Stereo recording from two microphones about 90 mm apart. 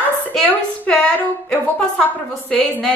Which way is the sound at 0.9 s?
15° left (ahead or behind).